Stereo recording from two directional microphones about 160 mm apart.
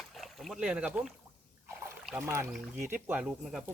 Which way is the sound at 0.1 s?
Centre (ahead or behind).